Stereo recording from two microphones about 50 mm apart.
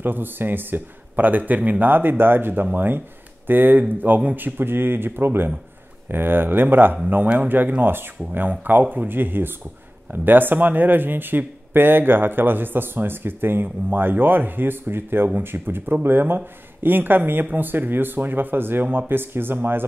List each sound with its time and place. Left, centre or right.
0.0 s speech: right
4.6 s speech: right